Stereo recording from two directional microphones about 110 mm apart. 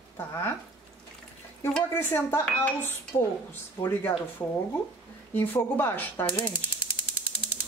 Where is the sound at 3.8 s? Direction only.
35° left (ahead or behind).